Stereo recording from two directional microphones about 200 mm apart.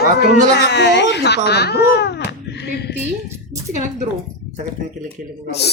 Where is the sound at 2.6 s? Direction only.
55° left (ahead or behind).